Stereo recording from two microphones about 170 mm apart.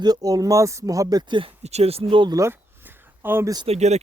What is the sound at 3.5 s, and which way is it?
Speech, 30° right (ahead or behind).